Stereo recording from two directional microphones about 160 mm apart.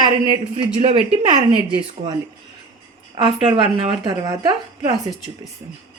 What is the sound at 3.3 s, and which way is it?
Speech, 35° right (ahead or behind).